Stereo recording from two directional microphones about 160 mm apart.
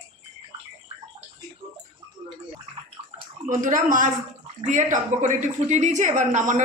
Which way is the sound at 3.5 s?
55° right (ahead or behind).